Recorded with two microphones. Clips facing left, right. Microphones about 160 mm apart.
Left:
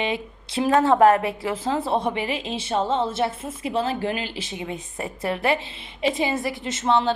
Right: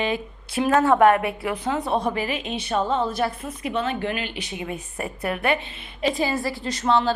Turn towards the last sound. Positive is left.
turn(degrees=20)  # may be behind; listen again after turning